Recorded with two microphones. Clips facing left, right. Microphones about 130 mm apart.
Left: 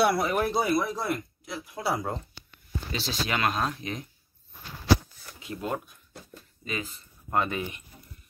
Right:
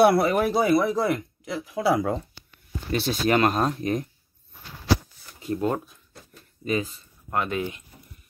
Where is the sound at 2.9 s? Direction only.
55° right (ahead or behind).